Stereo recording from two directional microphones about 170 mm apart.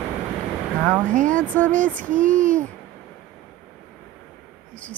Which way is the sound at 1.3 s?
10° left (ahead or behind).